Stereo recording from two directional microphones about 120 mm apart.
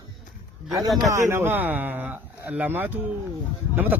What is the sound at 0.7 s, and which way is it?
Speech, centre (ahead or behind).